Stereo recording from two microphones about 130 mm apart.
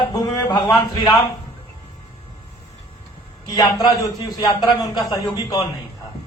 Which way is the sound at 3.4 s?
30° left (ahead or behind).